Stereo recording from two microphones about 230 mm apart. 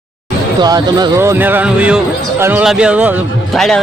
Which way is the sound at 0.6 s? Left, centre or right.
Centre.